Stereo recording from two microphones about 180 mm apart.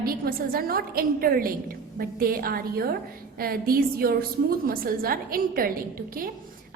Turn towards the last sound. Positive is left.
turn(degrees=-50)  # may be behind; listen again after turning